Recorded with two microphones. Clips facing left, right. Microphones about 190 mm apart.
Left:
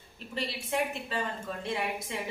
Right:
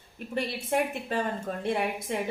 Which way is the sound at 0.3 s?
50° right (ahead or behind).